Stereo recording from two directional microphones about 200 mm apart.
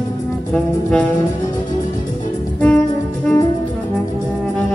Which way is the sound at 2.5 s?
5° left (ahead or behind).